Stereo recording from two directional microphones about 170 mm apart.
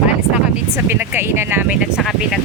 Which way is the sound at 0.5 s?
10° right (ahead or behind).